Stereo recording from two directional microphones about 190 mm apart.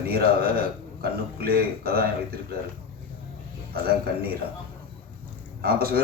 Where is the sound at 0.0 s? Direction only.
55° right (ahead or behind).